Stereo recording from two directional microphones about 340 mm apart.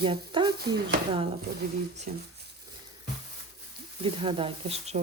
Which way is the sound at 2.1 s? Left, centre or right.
Right.